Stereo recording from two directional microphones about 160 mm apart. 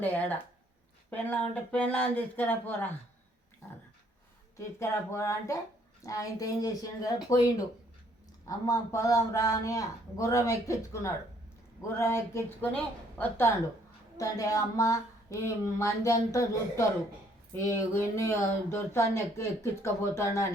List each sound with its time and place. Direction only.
0.0 s speech: 10° left (ahead or behind)
4.5 s a man's voice: 20° left (ahead or behind)